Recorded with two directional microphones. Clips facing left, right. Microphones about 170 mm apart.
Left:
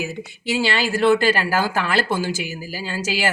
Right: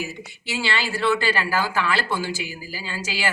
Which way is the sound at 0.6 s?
45° left (ahead or behind).